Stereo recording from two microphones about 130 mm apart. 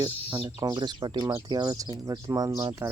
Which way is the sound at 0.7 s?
35° right (ahead or behind).